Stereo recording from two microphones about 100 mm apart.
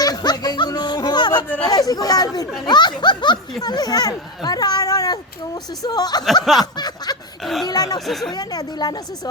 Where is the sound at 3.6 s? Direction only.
40° left (ahead or behind).